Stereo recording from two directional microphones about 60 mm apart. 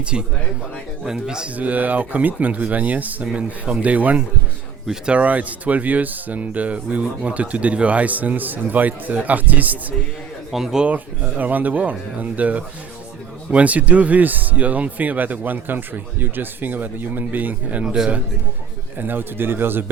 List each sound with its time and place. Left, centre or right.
0.0 s speech: centre
1.5 s speech: right
10.5 s speech: centre
10.8 s speech: right
17.8 s speech: centre
18.9 s speech: right